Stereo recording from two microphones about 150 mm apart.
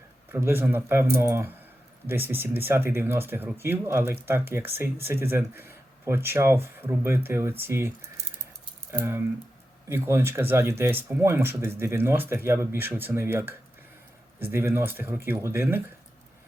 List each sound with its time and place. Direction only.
0.3 s speech: 15° right (ahead or behind)